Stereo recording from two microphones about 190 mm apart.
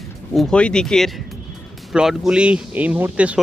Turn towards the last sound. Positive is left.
turn(degrees=-5)  # may be behind; listen again after turning